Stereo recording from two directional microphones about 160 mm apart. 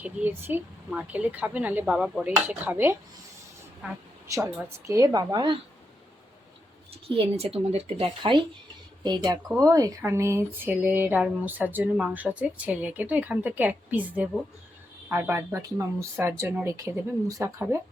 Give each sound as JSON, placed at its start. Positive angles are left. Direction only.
{"t": 0.0, "sound": "speech", "side_deg": -10}
{"t": 4.9, "sound": "a woman's voice", "side_deg": -25}
{"t": 6.9, "sound": "a woman's voice", "side_deg": -40}